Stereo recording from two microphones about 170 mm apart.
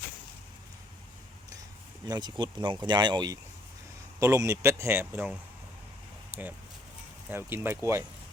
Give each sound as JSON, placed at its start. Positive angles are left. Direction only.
{"t": 2.0, "sound": "speech", "side_deg": -25}